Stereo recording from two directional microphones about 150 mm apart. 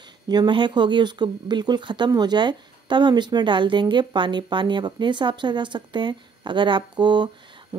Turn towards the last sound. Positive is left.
turn(degrees=-30)  # may be behind; listen again after turning